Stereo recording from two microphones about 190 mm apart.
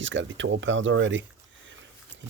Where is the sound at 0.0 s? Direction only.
80° right.